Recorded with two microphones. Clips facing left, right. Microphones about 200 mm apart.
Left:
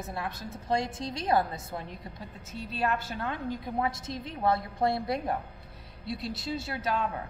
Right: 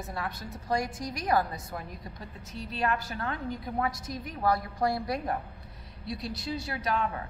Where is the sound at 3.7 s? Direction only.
25° left (ahead or behind).